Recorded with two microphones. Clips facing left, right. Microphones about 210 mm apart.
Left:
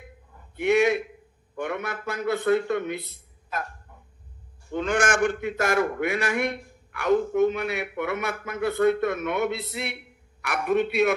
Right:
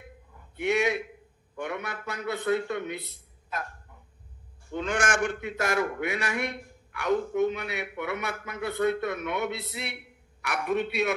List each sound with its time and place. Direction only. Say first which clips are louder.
0.7 s a man's voice: left 5 dB; 55° left (ahead or behind)
4.7 s a man's voice: left 4 dB; 55° left (ahead or behind)